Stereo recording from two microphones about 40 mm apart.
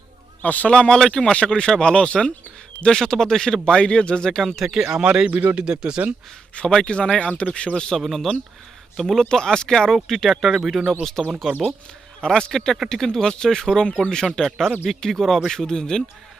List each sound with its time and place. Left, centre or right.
0.4 s speech: left
0.7 s speech: left
0.9 s speech: centre
1.3 s speech: left
2.8 s speech: centre
3.7 s speech: left
4.6 s speech: centre
5.0 s speech: right
6.5 s speech: left
7.9 s speech: centre
9.3 s speech: centre
9.9 s speech: centre
11.0 s speech: centre